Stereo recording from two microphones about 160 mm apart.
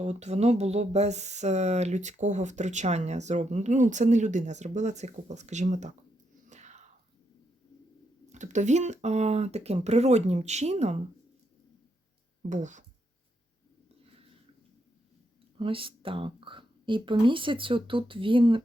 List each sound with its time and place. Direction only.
0.0 s speech: 45° right (ahead or behind)
6.5 s whispering: 45° right (ahead or behind)
8.3 s speech: 50° right (ahead or behind)
12.4 s speech: 50° right (ahead or behind)
15.5 s speech: 35° right (ahead or behind)